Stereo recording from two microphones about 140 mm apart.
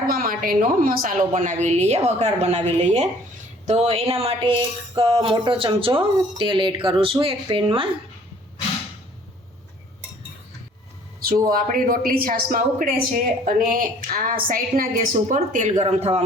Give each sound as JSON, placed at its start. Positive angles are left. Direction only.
{"t": 0.1, "sound": "a woman's voice", "side_deg": -90}
{"t": 3.7, "sound": "speech", "side_deg": -50}
{"t": 11.4, "sound": "speech", "side_deg": -85}
{"t": 15.8, "sound": "a man's voice", "side_deg": -50}